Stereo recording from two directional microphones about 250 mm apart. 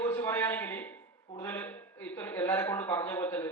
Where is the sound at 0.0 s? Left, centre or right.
Centre.